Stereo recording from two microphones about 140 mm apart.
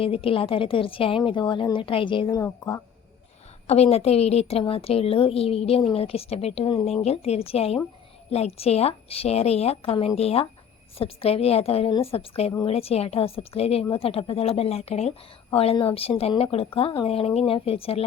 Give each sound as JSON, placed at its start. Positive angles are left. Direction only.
{"t": 0.0, "sound": "a woman's voice", "side_deg": 40}
{"t": 2.3, "sound": "a woman's voice", "side_deg": 25}
{"t": 3.7, "sound": "a woman's voice", "side_deg": 50}